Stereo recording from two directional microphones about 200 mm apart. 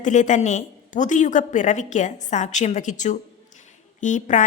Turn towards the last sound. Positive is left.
turn(degrees=40)  # may be behind; listen again after turning